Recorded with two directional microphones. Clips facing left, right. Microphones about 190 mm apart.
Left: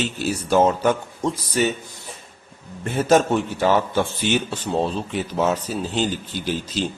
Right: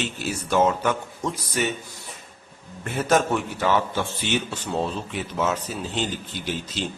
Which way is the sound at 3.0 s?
30° left (ahead or behind).